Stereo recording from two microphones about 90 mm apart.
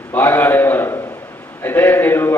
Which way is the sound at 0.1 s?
25° left (ahead or behind).